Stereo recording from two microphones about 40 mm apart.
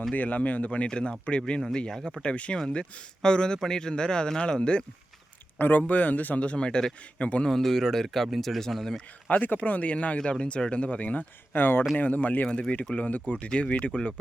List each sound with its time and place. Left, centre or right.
0.1 s a man's voice: left
0.9 s speech: left
5.5 s a man's voice: left
7.2 s a man's voice: left
7.4 s speech: centre
9.3 s a man's voice: left
11.5 s speech: left
11.9 s speech: left
12.5 s speech: left
13.0 s a man's voice: left